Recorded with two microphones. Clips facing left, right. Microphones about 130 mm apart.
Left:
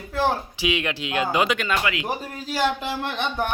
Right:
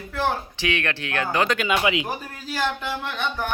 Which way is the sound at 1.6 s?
15° right (ahead or behind).